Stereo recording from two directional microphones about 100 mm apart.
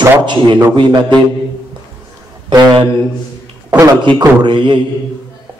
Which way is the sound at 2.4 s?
50° right (ahead or behind).